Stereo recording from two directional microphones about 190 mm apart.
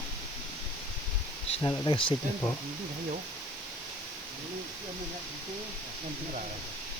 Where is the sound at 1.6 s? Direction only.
15° left (ahead or behind).